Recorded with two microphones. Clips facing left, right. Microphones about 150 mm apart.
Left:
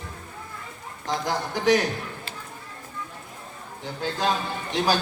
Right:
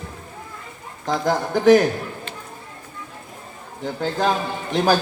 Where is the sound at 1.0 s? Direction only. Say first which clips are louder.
Right 6 dB; 50° right (ahead or behind).